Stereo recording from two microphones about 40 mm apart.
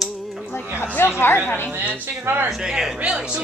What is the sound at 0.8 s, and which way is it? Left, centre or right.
Speech, left.